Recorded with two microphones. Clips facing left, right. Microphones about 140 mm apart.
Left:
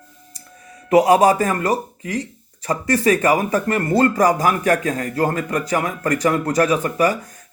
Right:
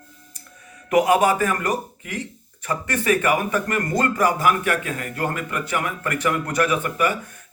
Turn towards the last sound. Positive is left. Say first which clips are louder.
# left 4 dB
turn(degrees=40)  # may be behind; listen again after turning